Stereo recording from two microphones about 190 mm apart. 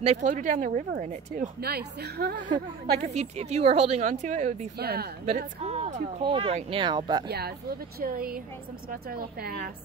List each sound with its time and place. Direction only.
0.0 s speech: 35° right (ahead or behind)
1.7 s a woman's voice: 55° right (ahead or behind)
2.5 s speech: 35° right (ahead or behind)
4.7 s a woman's voice: 55° right (ahead or behind)
5.6 s speech: 35° right (ahead or behind)
7.2 s a woman's voice: 55° right (ahead or behind)